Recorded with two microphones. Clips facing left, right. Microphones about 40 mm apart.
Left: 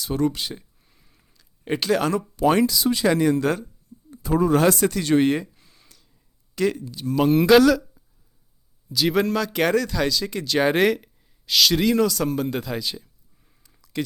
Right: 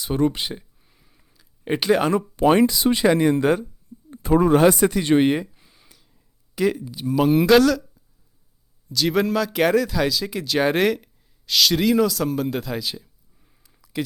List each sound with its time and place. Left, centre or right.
0.0 s speech: right
0.5 s a sound: centre
2.4 s speech: right
4.1 s speech: right
4.5 s a sound: centre
6.8 s speech: centre